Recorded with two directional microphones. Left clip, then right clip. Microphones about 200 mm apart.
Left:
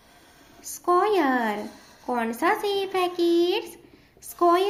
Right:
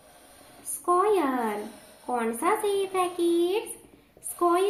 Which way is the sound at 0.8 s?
50° left (ahead or behind).